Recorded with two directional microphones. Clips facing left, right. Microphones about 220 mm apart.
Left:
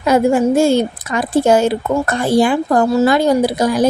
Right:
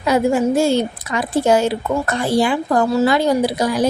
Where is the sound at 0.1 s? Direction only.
50° left (ahead or behind).